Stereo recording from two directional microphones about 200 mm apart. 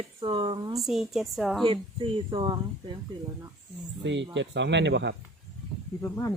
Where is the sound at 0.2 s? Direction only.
25° right (ahead or behind).